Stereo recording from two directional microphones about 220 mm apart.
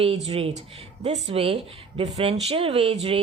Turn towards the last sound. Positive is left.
turn(degrees=-25)  # may be behind; listen again after turning